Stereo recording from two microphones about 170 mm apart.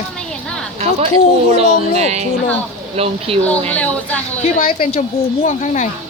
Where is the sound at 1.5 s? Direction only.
40° right (ahead or behind).